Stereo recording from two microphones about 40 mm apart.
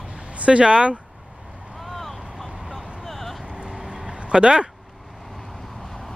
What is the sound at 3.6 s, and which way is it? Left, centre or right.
Vehicle, centre.